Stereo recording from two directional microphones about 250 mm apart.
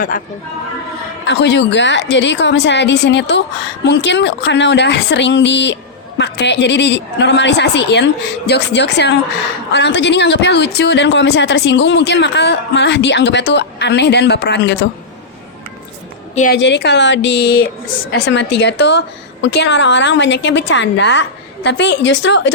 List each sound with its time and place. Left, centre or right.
1.3 s a woman's voice: left
16.3 s a woman's voice: left
16.6 s a woman's voice: left